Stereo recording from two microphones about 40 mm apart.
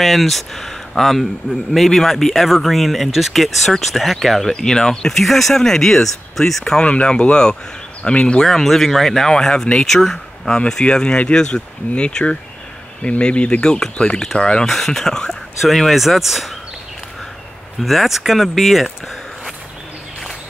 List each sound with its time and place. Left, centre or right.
0.0 s speech: centre
4.5 s speech: centre
6.8 s speech: left
8.4 s speech: centre; by 13.7 s left
13.7 s speech: centre
14.7 s speech: centre
15.6 s speech: centre
17.7 s speech: centre